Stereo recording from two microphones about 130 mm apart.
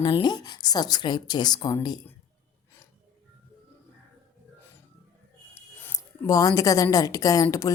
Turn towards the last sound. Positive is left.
turn(degrees=25)  # may be behind; listen again after turning